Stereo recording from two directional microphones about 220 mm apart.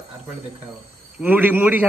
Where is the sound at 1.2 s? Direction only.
10° right (ahead or behind).